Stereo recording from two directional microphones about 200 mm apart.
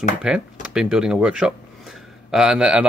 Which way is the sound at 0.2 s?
5° right (ahead or behind).